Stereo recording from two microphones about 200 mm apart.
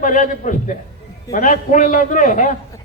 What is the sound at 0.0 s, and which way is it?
A man's voice, 40° left (ahead or behind).